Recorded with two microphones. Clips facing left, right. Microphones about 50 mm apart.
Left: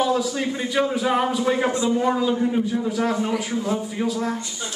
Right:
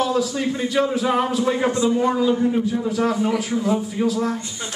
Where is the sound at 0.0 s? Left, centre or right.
Centre.